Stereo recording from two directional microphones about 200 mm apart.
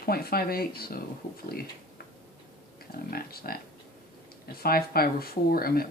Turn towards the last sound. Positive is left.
turn(degrees=50)  # may be behind; listen again after turning